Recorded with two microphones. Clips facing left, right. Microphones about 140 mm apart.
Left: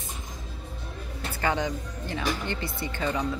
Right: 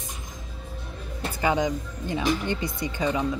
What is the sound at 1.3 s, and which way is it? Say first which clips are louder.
Speech: right 3 dB; 15° right (ahead or behind).